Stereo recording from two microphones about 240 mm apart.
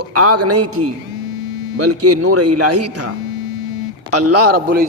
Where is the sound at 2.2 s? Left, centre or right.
Right.